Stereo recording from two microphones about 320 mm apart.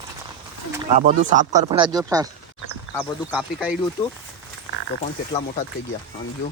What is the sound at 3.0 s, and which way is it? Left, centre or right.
Speech, centre.